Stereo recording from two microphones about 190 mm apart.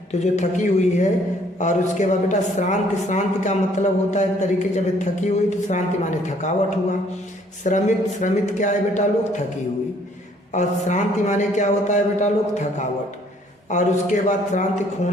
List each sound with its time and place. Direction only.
0.1 s a woman's voice: 35° left (ahead or behind)
7.6 s a woman's voice: 40° left (ahead or behind)
10.5 s a woman's voice: 40° left (ahead or behind)
13.7 s a woman's voice: 40° left (ahead or behind)